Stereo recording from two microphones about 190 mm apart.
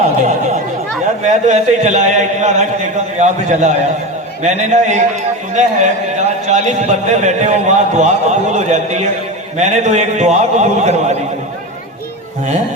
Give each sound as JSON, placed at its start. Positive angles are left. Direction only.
{"t": 1.2, "sound": "a man's voice", "side_deg": -40}